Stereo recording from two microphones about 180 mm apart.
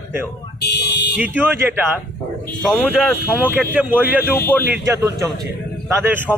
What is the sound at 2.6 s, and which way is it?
A man's voice, centre (ahead or behind).